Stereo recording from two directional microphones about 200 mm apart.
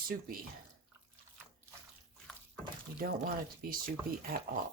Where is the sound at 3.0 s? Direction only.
45° right (ahead or behind).